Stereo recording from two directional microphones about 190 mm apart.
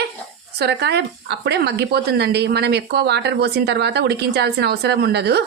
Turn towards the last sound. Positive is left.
turn(degrees=-60)  # may be behind; listen again after turning